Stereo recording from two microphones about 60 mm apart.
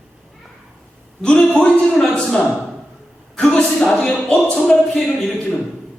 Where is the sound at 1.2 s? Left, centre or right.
Centre.